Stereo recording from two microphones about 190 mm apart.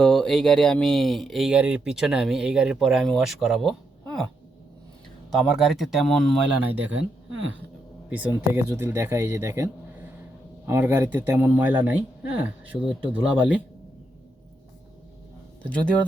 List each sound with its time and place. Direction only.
0.0 s speech: 5° left (ahead or behind)
5.3 s speech: centre (ahead or behind)
7.3 s speech: 90° right
8.1 s speech: 10° right (ahead or behind)
15.6 s speech: 5° left (ahead or behind)